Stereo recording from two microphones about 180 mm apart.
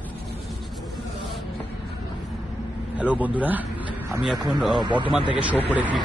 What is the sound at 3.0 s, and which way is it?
Speech, 10° right (ahead or behind).